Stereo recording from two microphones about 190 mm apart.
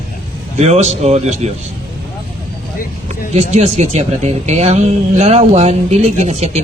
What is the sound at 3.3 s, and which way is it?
Speech, 35° right (ahead or behind).